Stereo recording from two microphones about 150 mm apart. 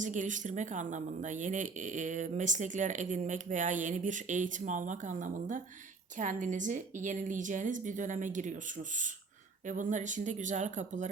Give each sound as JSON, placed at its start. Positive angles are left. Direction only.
{"t": 0.0, "sound": "speech", "side_deg": -55}